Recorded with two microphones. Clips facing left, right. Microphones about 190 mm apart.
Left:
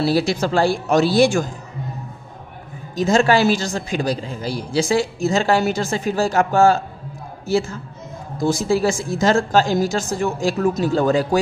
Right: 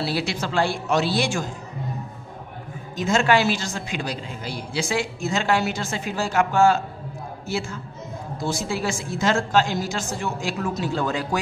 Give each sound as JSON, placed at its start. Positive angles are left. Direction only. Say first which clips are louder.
{"t": 0.0, "sound": "a woman's voice", "louder": "left 7 dB", "side_deg": 40}
{"t": 3.0, "sound": "a man's voice", "louder": "left 4 dB", "side_deg": 35}
{"t": 8.4, "sound": "a man's voice", "louder": "left 9 dB", "side_deg": 45}